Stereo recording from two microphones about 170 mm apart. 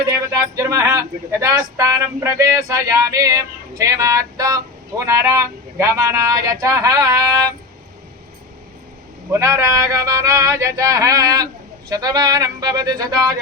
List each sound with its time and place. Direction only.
0.1 s speech: 15° right (ahead or behind)
9.3 s speech: 15° right (ahead or behind)